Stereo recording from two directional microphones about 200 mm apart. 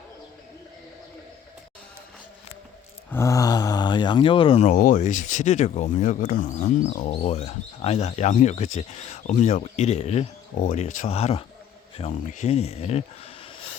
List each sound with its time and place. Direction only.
3.1 s speech: 15° left (ahead or behind)
4.7 s speech: 40° left (ahead or behind)